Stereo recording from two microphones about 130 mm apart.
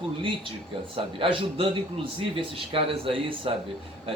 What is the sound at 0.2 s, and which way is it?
A man's voice, 40° right (ahead or behind).